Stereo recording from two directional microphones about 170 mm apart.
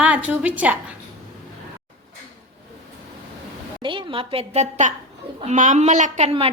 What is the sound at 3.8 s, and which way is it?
A woman's voice, 30° right (ahead or behind).